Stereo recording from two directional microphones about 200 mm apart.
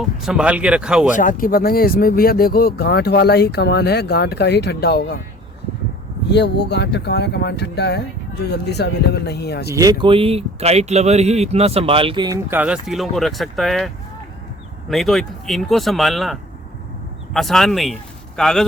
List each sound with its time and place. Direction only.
0.0 s speech: centre (ahead or behind)
1.1 s speech: 40° left (ahead or behind)
6.3 s speech: 55° left (ahead or behind)
9.6 s a man's voice: 15° right (ahead or behind); by 18.6 s centre (ahead or behind)